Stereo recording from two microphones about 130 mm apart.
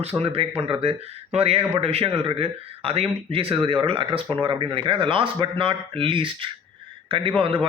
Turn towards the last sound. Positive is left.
turn(degrees=-45)  # may be behind; listen again after turning